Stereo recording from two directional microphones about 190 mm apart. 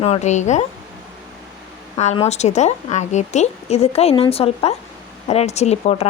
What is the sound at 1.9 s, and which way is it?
A woman's voice, 35° left (ahead or behind).